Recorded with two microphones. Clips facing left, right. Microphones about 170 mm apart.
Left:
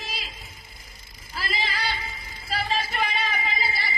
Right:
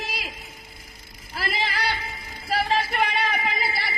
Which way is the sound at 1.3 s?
60° right (ahead or behind).